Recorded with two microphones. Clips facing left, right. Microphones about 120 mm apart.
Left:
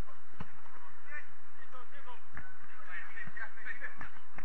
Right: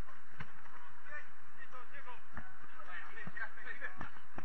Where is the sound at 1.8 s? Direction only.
5° left (ahead or behind).